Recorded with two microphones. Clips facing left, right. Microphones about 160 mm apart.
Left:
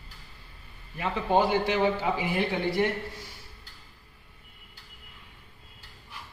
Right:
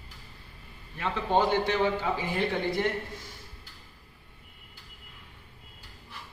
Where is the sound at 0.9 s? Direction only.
5° left (ahead or behind).